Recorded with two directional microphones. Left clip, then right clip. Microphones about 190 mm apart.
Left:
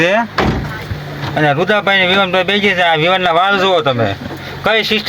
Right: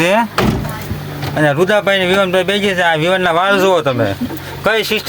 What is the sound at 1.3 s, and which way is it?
Speech, centre (ahead or behind).